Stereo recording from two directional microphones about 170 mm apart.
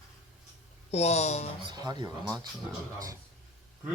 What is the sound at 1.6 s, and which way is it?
Mantra, 25° right (ahead or behind).